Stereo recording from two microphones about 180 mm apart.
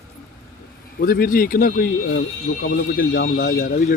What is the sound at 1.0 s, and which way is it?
Speech, 55° left (ahead or behind).